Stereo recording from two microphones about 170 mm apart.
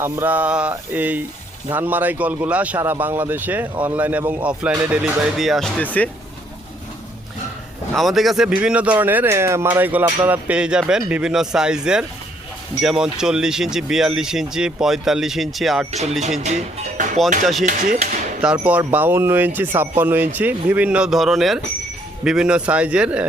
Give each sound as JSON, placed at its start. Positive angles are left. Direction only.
{"t": 0.0, "sound": "a man's voice", "side_deg": -10}
{"t": 7.9, "sound": "speech", "side_deg": 0}
{"t": 15.9, "sound": "speech", "side_deg": -40}
{"t": 17.4, "sound": "speech", "side_deg": 0}
{"t": 17.7, "sound": "speech", "side_deg": -50}
{"t": 18.4, "sound": "a man's voice", "side_deg": -10}